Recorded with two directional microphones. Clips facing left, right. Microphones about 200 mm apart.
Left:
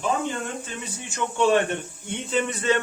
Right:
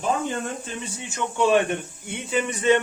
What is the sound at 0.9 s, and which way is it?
Speech, 15° right (ahead or behind).